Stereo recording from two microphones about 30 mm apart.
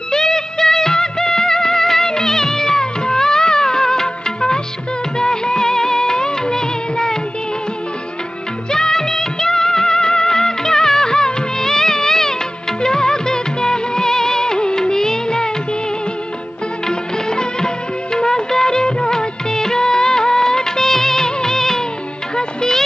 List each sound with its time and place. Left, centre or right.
0.1 s music: centre
5.2 s music of bollywood: left
8.7 s music of bollywood: centre
11.7 s music: centre
12.8 s music of bollywood: left
16.8 s music: left